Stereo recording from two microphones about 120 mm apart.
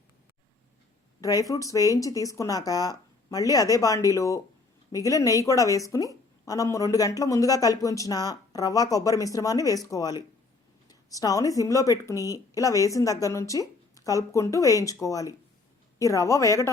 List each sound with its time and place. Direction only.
1.2 s a woman's voice: 30° left (ahead or behind)